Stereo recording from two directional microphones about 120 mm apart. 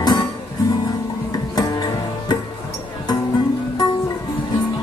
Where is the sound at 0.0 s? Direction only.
35° left (ahead or behind).